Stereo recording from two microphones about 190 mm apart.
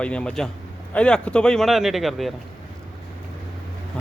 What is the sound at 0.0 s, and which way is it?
Speech, 5° left (ahead or behind).